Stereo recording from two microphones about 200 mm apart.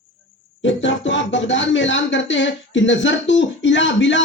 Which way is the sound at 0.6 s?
65° left (ahead or behind).